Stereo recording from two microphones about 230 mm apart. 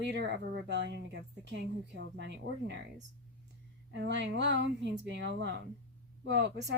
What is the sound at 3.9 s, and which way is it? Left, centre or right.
Speech, right.